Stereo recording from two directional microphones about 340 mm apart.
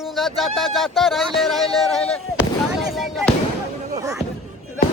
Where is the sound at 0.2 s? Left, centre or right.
Centre.